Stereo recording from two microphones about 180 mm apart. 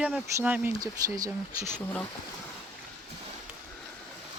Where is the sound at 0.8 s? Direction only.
20° right (ahead or behind).